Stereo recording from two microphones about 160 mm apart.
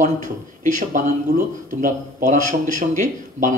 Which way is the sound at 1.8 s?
55° right (ahead or behind).